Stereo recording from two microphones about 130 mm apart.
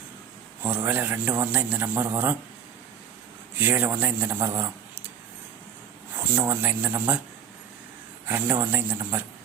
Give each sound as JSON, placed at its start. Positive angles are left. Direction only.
{"t": 0.6, "sound": "a man's voice", "side_deg": -15}
{"t": 3.6, "sound": "a man's voice", "side_deg": -15}
{"t": 6.5, "sound": "a man's voice", "side_deg": -15}
{"t": 8.3, "sound": "a man's voice", "side_deg": -15}